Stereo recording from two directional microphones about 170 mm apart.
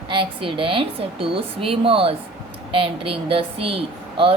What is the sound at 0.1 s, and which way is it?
A woman's voice, 30° right (ahead or behind).